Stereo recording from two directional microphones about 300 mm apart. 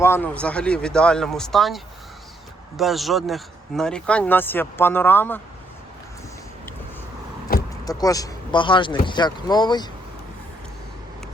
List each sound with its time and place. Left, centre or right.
0.0 s speech: centre
7.5 s vehicle: left
7.9 s speech: centre